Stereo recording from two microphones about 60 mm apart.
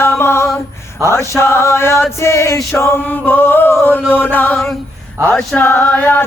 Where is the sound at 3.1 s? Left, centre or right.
Left.